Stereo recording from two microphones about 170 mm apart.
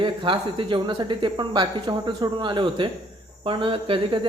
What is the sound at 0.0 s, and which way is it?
Speech, 30° right (ahead or behind).